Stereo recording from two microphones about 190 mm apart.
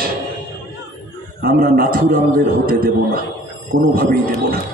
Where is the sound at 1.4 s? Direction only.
50° right (ahead or behind).